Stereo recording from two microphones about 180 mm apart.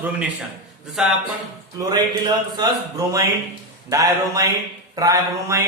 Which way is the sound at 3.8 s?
20° right (ahead or behind).